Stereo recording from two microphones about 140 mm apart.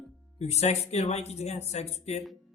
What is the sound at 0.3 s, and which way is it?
Speech, 50° left (ahead or behind).